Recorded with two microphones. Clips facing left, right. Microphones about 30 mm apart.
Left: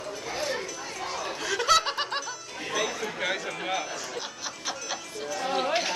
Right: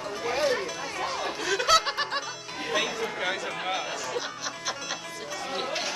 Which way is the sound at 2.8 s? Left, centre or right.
Right.